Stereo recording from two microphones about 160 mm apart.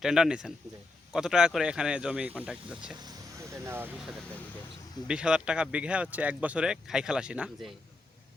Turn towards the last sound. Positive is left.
turn(degrees=-5)  # may be behind; listen again after turning